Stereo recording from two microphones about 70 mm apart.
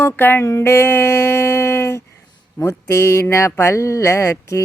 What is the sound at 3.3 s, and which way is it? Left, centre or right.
Speech, left.